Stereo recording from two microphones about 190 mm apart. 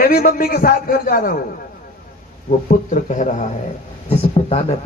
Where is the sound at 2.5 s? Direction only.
40° left (ahead or behind).